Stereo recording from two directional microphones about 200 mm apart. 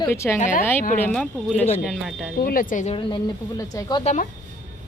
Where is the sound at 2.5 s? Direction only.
40° left (ahead or behind); by 4.0 s 20° left (ahead or behind).